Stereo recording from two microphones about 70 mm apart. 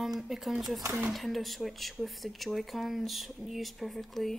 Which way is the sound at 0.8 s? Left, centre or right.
Right.